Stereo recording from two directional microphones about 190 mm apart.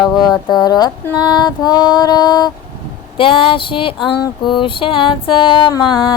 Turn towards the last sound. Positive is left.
turn(degrees=20)  # may be behind; listen again after turning